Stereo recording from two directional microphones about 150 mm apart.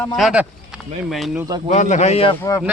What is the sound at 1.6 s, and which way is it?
Speech, 50° left (ahead or behind).